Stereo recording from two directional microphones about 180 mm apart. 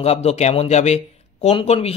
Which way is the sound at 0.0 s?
35° left (ahead or behind).